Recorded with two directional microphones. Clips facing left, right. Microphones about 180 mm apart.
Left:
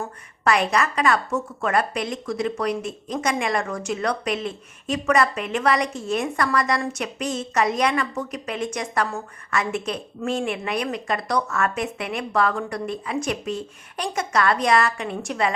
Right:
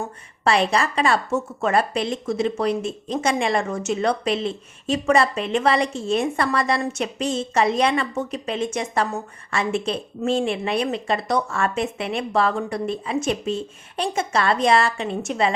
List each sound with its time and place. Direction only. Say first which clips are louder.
0.4 s a woman's voice: right 1 dB; 30° right (ahead or behind)